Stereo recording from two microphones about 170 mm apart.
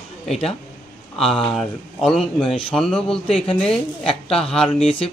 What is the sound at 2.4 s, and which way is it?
Speech, 30° left (ahead or behind).